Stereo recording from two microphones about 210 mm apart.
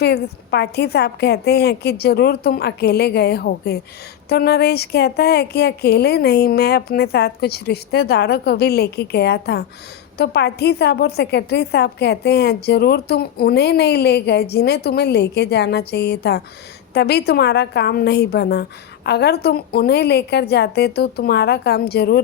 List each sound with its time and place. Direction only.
0.0 s a woman's voice: 50° left (ahead or behind)